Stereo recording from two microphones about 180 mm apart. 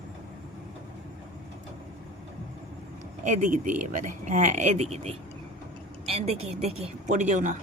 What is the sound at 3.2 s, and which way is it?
Speech, 45° right (ahead or behind).